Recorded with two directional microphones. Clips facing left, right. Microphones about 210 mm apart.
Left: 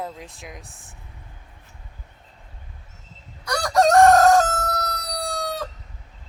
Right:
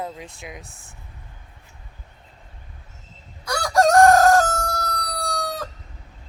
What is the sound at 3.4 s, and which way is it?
Chicken, centre (ahead or behind).